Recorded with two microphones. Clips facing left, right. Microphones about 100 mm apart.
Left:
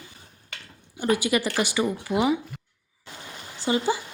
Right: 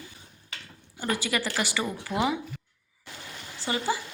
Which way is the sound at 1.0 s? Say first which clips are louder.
Left 6 dB; 15° left (ahead or behind).